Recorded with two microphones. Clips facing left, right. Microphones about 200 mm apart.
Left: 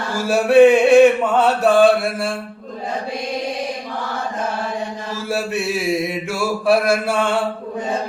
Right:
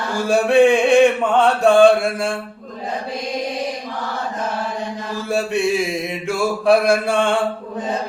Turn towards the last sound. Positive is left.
turn(degrees=5)  # may be behind; listen again after turning